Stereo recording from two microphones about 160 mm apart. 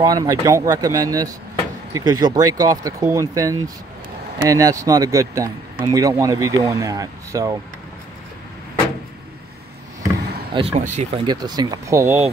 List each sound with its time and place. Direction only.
0.0 s speech: 25° right (ahead or behind)
10.5 s speech: 35° right (ahead or behind)
10.8 s speech: 50° right (ahead or behind)
11.2 s speech: 25° right (ahead or behind)